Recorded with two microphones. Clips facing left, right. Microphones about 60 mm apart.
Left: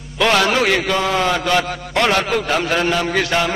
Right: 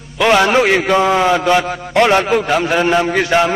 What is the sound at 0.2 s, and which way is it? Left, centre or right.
A man's voice, centre.